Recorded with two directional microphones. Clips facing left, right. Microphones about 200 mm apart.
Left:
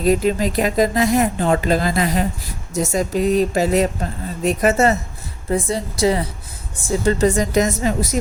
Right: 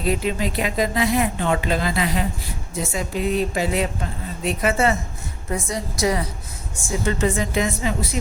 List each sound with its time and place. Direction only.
0.0 s speech: 40° left (ahead or behind)
5.5 s a woman's voice: 30° left (ahead or behind)